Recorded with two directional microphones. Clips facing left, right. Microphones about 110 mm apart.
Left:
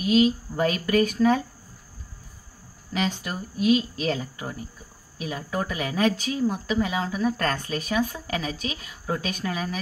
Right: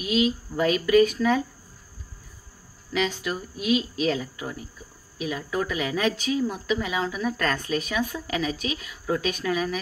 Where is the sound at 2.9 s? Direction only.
35° left (ahead or behind).